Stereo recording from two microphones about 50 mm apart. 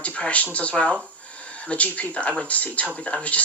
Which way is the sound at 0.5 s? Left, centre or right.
Left.